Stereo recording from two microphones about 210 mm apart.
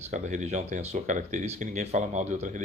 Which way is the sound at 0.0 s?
35° right (ahead or behind).